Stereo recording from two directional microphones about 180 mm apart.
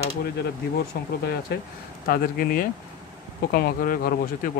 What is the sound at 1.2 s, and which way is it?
Speech, 60° left (ahead or behind).